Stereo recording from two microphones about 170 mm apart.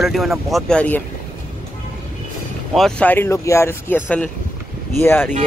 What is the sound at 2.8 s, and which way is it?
A man's voice, 5° left (ahead or behind).